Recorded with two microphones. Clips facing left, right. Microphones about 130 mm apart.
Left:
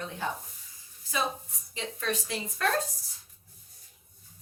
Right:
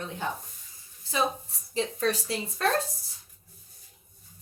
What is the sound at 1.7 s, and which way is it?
Speech, 35° right (ahead or behind).